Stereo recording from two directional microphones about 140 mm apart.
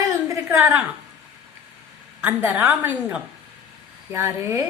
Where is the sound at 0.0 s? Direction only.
20° right (ahead or behind).